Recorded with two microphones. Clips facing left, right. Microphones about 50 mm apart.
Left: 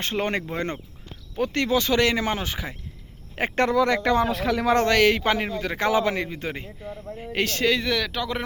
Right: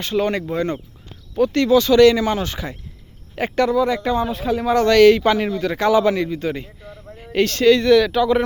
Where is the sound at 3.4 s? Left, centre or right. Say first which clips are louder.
Right 3 dB; left.